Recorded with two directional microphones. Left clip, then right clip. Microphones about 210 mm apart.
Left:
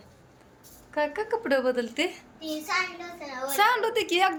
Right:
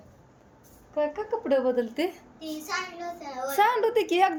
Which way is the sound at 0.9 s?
5° right (ahead or behind).